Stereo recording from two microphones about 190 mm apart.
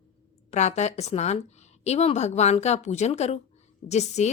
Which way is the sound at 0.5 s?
35° left (ahead or behind).